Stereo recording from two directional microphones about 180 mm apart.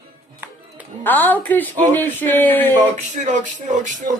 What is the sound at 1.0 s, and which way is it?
A woman's voice, 10° left (ahead or behind).